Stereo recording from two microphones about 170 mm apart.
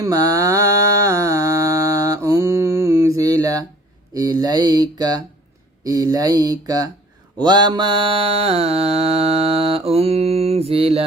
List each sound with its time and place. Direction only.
0.0 s mantra: 20° right (ahead or behind)
4.1 s speech: 20° right (ahead or behind)
7.4 s mantra: 25° right (ahead or behind)